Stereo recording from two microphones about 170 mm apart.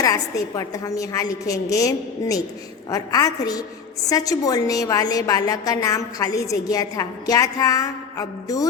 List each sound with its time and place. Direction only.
0.0 s a woman's voice: 20° left (ahead or behind)